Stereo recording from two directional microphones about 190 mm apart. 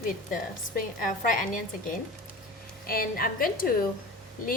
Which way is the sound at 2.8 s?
50° left (ahead or behind).